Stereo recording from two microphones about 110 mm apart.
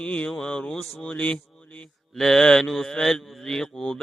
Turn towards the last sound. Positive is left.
turn(degrees=5)  # may be behind; listen again after turning